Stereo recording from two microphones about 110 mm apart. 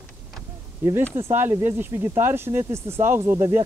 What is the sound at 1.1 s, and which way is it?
Speech, 20° right (ahead or behind).